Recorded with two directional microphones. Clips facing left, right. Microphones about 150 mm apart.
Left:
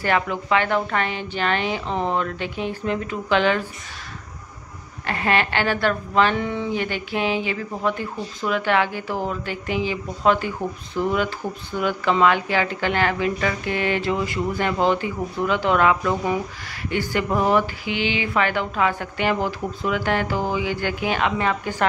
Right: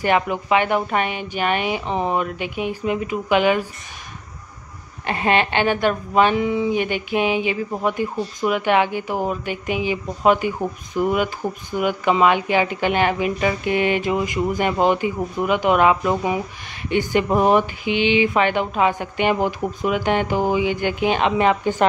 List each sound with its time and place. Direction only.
0.0 s a woman's voice: 15° right (ahead or behind)
5.0 s a woman's voice: 20° right (ahead or behind)